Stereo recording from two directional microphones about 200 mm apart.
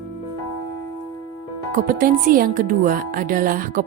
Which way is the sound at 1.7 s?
40° right (ahead or behind).